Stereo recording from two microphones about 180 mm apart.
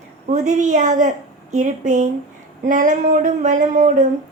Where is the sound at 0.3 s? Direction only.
40° right (ahead or behind).